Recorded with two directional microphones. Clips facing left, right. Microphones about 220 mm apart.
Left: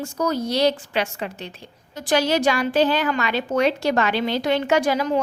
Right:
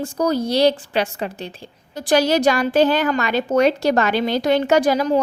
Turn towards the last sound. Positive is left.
turn(degrees=-40)  # may be behind; listen again after turning